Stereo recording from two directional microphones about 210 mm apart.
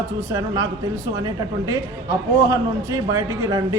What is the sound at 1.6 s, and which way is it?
A man's voice, 15° right (ahead or behind).